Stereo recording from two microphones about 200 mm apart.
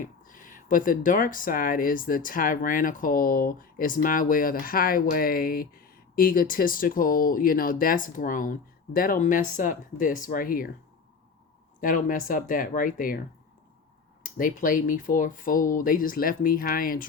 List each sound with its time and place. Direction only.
0.0 s speech: 40° left (ahead or behind)
11.8 s speech: 45° left (ahead or behind)
14.3 s speech: 45° left (ahead or behind)